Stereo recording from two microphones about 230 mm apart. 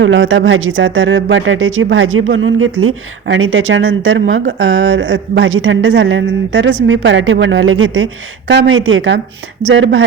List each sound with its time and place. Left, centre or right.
0.0 s a woman's voice: right